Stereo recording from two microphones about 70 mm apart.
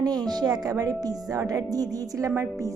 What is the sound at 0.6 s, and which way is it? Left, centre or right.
A woman's voice, right.